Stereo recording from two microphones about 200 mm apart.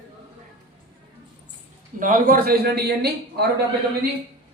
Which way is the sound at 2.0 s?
45° right (ahead or behind).